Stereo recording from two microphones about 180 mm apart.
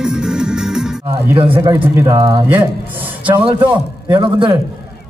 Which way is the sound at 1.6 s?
20° right (ahead or behind).